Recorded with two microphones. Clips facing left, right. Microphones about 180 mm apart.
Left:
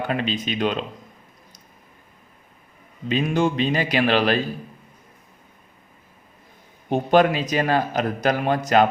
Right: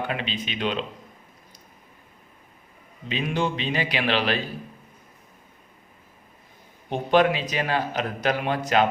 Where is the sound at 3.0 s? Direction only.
45° left (ahead or behind).